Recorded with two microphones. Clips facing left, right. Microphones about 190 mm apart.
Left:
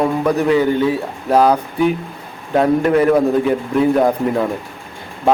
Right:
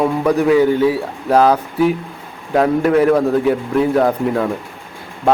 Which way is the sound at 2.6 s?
Centre (ahead or behind).